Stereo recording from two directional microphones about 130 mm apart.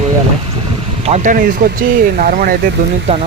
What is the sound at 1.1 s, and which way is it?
Speech, 65° right (ahead or behind).